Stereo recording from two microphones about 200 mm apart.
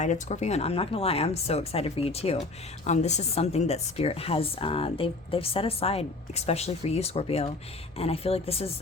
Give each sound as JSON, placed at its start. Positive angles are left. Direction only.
{"t": 0.0, "sound": "a woman's voice", "side_deg": 35}